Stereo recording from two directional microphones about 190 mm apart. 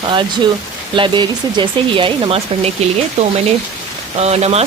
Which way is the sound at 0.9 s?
25° right (ahead or behind).